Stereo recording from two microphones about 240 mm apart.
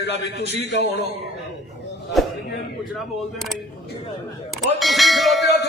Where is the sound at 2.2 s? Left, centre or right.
Centre.